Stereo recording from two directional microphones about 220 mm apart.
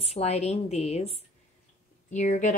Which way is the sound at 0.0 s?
30° left (ahead or behind).